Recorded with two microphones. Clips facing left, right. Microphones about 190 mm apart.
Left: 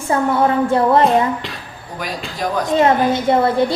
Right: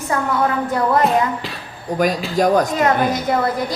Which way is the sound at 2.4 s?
45° right (ahead or behind).